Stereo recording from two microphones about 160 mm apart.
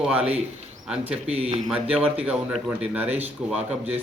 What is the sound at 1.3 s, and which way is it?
Speech, 40° right (ahead or behind).